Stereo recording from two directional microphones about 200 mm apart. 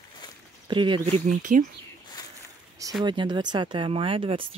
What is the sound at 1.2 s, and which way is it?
Speech, 40° right (ahead or behind).